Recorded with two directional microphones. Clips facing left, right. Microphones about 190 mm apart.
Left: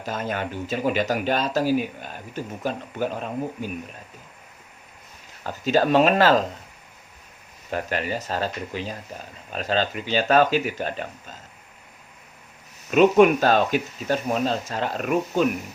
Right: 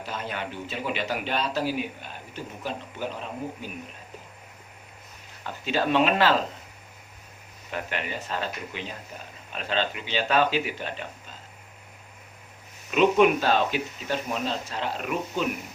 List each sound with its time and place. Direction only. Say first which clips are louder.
0.0 s speech: left 5 dB; 45° left (ahead or behind)
5.4 s speech: left 6 dB; 40° left (ahead or behind)
7.7 s speech: left 6 dB; 40° left (ahead or behind)
12.9 s speech: left 4 dB; 45° left (ahead or behind)